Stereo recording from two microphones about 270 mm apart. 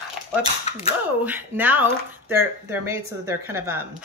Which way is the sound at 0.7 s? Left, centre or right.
Left.